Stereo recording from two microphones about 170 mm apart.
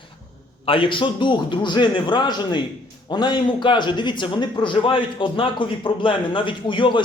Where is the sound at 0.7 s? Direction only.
30° left (ahead or behind).